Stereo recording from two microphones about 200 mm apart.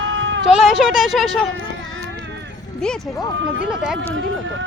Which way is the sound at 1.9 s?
60° right (ahead or behind).